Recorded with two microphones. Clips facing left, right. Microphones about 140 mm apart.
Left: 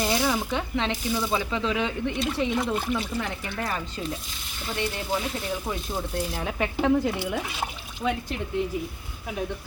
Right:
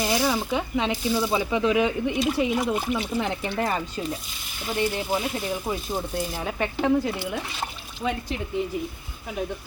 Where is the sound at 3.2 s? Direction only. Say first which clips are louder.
Right 5 dB; 20° right (ahead or behind); by 8.4 s 5° left (ahead or behind).